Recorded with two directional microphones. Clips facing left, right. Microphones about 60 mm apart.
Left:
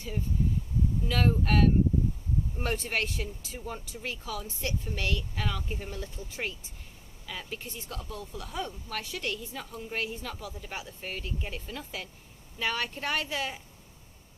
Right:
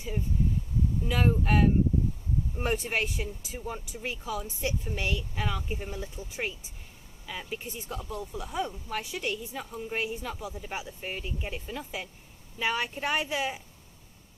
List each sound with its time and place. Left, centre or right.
1.0 s speech: centre